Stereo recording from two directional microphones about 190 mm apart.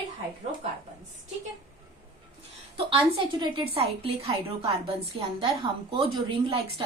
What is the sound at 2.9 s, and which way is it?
A woman's voice, 25° right (ahead or behind).